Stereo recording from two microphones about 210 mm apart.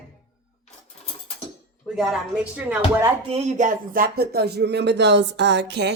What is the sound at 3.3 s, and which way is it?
A woman's voice, 30° right (ahead or behind).